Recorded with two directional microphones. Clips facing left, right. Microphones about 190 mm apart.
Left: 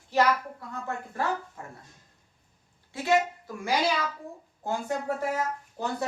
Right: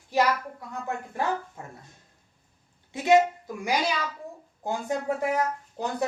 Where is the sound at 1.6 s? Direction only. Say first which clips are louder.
Right 1 dB; 20° right (ahead or behind).